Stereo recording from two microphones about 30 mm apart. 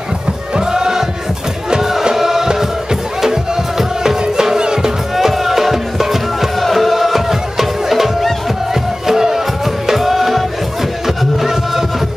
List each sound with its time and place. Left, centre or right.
0.6 s chant: centre
1.8 s music: centre
4.6 s music: right
5.1 s music: centre